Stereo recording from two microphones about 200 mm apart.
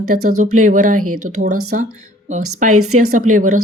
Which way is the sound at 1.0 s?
90° right.